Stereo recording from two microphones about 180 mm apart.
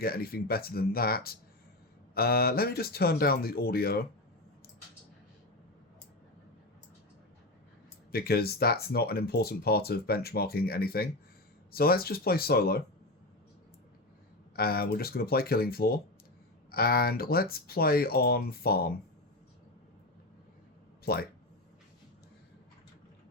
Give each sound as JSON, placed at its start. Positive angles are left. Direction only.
{"t": 0.0, "sound": "speech", "side_deg": 55}
{"t": 8.1, "sound": "speech", "side_deg": 60}
{"t": 14.5, "sound": "speech", "side_deg": 55}
{"t": 21.0, "sound": "speech", "side_deg": 60}